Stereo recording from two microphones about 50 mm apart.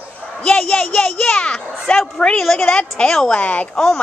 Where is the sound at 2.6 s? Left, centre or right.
Centre.